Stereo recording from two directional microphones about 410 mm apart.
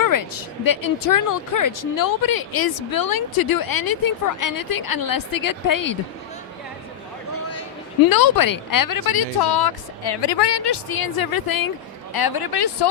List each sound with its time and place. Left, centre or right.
0.0 s speech: left
8.1 s speech: left